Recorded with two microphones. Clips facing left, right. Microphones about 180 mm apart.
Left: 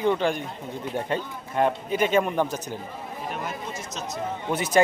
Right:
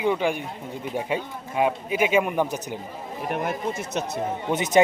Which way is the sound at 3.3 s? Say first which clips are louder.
Right 9 dB; 60° right (ahead or behind).